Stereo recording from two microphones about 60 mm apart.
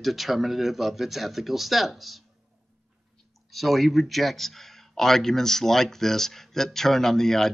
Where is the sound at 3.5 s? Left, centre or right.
Centre.